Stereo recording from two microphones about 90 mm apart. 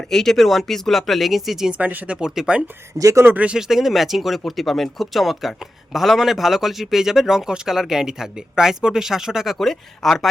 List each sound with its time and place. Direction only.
0.1 s speech: 5° left (ahead or behind)
1.8 s speech: 20° right (ahead or behind)
2.2 s speech: 5° right (ahead or behind)
3.0 s speech: 35° right (ahead or behind)
3.2 s speech: 15° right (ahead or behind); by 10.2 s centre (ahead or behind)